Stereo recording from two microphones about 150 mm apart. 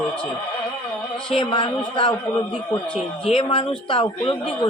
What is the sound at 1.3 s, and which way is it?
Speech, 35° left (ahead or behind).